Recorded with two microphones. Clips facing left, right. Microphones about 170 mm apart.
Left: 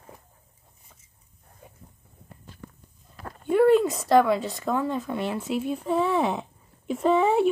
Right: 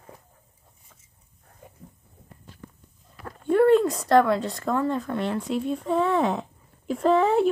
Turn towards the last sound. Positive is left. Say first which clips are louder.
# right 1 dB
turn(degrees=0)  # may be behind; listen again after turning